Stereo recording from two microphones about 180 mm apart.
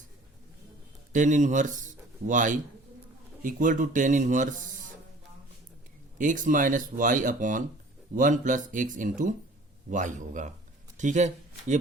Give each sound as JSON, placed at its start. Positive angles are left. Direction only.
{"t": 1.1, "sound": "speech", "side_deg": -45}
{"t": 6.1, "sound": "speech", "side_deg": -45}